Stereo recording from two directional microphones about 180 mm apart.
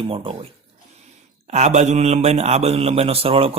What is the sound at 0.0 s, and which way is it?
Speech, 30° right (ahead or behind).